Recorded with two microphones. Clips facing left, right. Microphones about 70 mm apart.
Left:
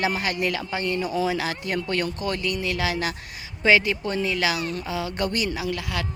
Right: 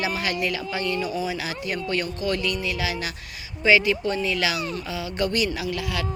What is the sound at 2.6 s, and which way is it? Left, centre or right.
A woman's voice, left.